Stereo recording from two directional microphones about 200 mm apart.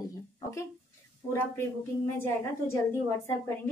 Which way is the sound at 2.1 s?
10° left (ahead or behind).